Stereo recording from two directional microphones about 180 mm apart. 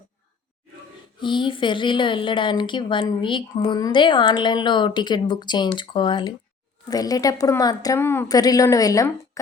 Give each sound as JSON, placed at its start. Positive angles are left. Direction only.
{"t": 1.2, "sound": "a woman's voice", "side_deg": 25}